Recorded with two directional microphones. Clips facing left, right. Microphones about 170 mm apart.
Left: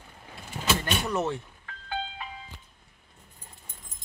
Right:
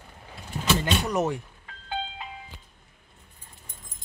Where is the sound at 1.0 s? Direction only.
15° right (ahead or behind).